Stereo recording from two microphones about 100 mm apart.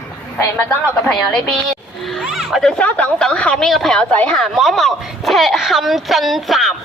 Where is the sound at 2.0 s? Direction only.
Centre (ahead or behind).